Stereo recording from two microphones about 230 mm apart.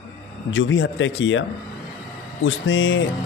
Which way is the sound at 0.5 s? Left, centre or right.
Left.